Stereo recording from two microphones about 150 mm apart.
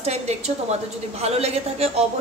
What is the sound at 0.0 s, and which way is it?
Speech, 45° right (ahead or behind).